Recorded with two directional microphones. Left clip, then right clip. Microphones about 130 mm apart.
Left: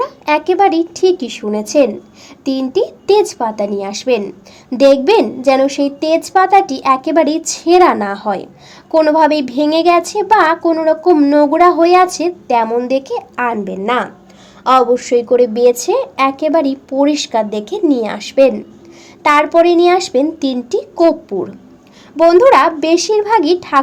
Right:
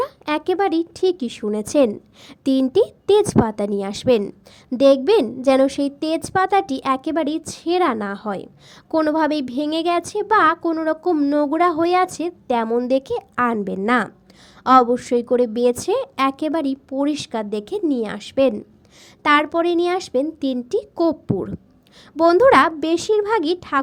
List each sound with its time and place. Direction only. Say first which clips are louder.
0.3 s a woman's voice: left 9 dB; 40° right (ahead or behind)
4.8 s a woman's voice: left 5 dB; 35° right (ahead or behind)